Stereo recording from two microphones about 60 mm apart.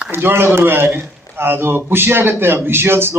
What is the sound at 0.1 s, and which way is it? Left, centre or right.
A man's voice, right.